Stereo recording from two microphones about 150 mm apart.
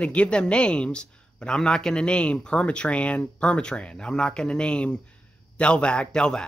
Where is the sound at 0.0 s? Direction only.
10° left (ahead or behind).